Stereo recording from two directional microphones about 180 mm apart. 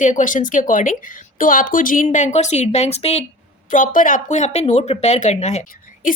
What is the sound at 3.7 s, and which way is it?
A woman's voice, 50° left (ahead or behind).